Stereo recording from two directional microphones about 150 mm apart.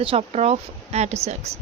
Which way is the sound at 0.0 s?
40° right (ahead or behind).